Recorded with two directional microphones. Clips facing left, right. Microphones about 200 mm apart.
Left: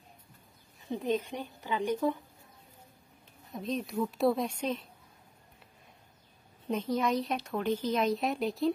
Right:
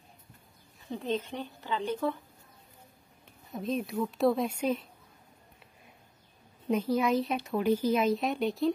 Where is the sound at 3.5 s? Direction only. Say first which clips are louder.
Right 2 dB; centre (ahead or behind).